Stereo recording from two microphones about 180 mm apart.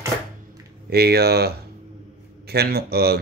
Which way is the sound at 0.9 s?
60° right (ahead or behind).